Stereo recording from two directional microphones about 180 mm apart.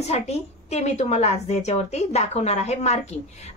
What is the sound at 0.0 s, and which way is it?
A woman's voice, 35° left (ahead or behind).